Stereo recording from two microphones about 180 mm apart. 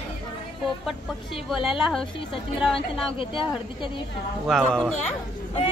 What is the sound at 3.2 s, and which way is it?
Speech, 30° left (ahead or behind).